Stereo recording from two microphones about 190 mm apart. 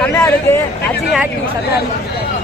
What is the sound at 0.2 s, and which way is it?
Speech, 15° left (ahead or behind).